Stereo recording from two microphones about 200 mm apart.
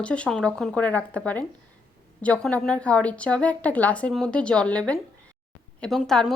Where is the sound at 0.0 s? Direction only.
5° left (ahead or behind).